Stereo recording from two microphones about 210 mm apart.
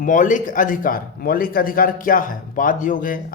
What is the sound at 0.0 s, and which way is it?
A man's voice, 40° left (ahead or behind).